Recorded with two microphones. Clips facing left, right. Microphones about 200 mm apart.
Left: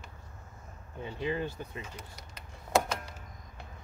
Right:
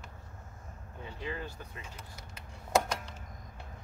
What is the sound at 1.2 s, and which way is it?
Speech, 20° left (ahead or behind).